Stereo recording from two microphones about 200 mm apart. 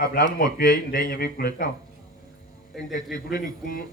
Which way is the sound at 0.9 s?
50° left (ahead or behind).